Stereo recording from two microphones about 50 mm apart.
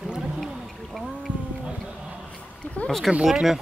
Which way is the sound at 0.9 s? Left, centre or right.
Centre.